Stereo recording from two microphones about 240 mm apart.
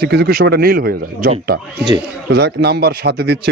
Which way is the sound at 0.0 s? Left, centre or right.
Right.